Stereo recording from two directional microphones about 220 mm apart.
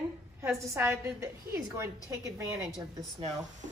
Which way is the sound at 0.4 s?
10° right (ahead or behind).